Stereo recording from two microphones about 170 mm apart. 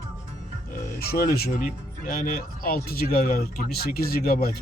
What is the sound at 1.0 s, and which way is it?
Speech, 65° left (ahead or behind).